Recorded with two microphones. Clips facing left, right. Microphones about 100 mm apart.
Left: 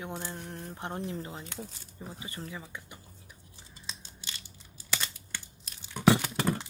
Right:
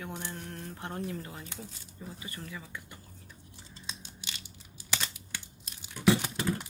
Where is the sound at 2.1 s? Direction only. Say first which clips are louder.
Left 2 dB; 25° left (ahead or behind).